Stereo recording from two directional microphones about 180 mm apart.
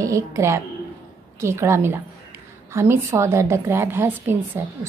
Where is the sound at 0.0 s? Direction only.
15° right (ahead or behind).